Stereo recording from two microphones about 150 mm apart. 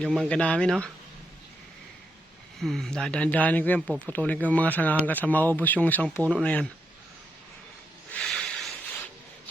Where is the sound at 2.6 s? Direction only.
Centre (ahead or behind).